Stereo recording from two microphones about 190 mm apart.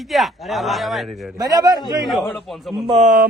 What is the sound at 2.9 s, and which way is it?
Speech, 40° right (ahead or behind).